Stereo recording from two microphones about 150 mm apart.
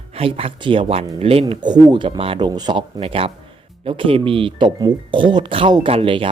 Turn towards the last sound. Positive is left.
turn(degrees=-35)  # may be behind; listen again after turning